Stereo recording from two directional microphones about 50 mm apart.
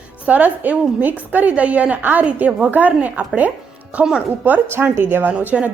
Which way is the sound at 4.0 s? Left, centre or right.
Right.